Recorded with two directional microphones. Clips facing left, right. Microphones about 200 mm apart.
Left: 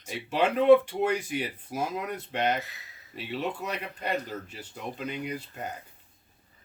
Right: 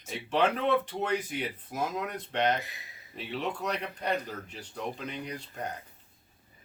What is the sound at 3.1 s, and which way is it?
Speech, 5° left (ahead or behind).